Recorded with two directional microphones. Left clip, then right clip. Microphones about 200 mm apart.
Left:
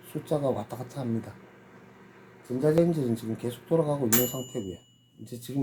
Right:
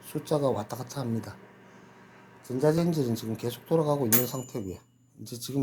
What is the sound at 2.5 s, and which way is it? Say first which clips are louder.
Speech: left 1 dB; 30° right (ahead or behind).